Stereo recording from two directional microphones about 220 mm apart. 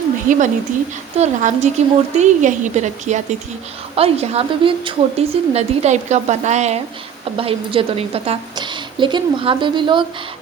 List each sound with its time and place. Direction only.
0.3 s a woman's voice: 35° right (ahead or behind)